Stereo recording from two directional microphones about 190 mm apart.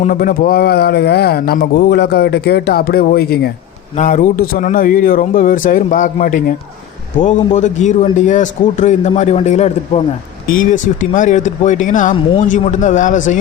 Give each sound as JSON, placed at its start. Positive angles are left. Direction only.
{"t": 0.0, "sound": "speech", "side_deg": 45}
{"t": 3.9, "sound": "a man's voice", "side_deg": 40}
{"t": 10.4, "sound": "a man's voice", "side_deg": 45}